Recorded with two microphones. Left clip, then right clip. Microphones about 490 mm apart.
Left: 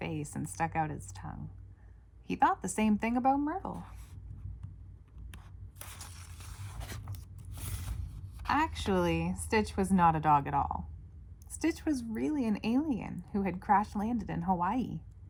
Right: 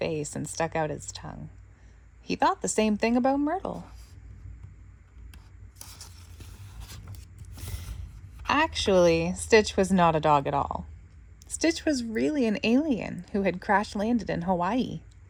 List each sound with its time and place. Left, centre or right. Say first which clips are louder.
0.0 s speech: right 9 dB; centre
8.4 s speech: right 6 dB; centre